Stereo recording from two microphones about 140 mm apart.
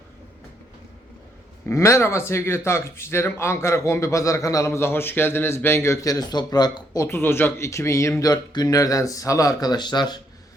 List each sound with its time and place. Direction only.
1.6 s speech: 20° left (ahead or behind)